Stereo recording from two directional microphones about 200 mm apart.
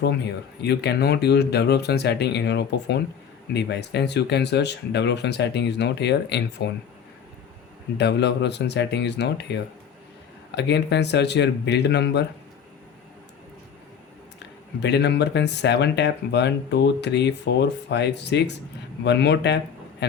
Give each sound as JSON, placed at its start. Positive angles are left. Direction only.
{"t": 0.6, "sound": "speech", "side_deg": 55}
{"t": 7.9, "sound": "speech", "side_deg": 60}
{"t": 14.3, "sound": "speech", "side_deg": 60}